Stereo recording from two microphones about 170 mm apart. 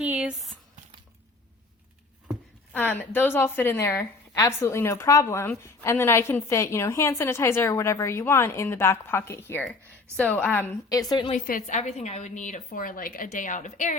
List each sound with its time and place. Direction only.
0.0 s a sound: 10° right (ahead or behind)
2.7 s a woman's voice: 10° left (ahead or behind)
11.3 s a woman's voice: 50° left (ahead or behind)